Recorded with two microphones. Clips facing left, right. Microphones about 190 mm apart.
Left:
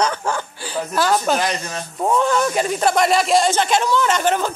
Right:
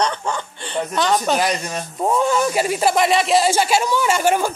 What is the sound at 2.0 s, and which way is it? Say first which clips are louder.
Speech: even; 10° right (ahead or behind).